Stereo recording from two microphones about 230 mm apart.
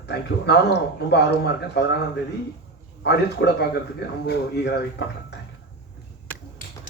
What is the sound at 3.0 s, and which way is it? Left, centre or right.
A man's voice, left.